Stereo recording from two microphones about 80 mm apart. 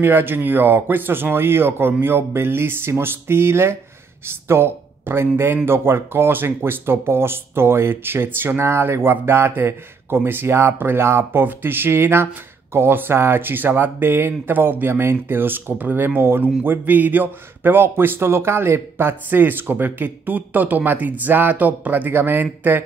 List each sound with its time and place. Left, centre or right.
0.0 s speech: right